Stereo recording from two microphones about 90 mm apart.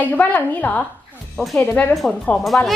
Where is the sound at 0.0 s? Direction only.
20° left (ahead or behind).